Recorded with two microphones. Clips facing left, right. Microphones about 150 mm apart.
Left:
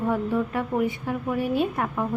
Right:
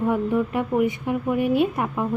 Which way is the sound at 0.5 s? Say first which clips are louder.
Right 3 dB; 15° right (ahead or behind).